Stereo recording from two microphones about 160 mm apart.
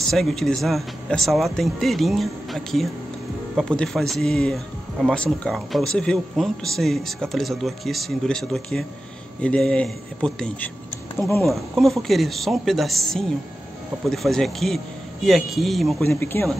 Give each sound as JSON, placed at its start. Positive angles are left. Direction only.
{"t": 0.0, "sound": "speech", "side_deg": 0}
{"t": 11.1, "sound": "speech", "side_deg": 15}
{"t": 11.4, "sound": "speech", "side_deg": 0}
{"t": 16.1, "sound": "speech", "side_deg": 15}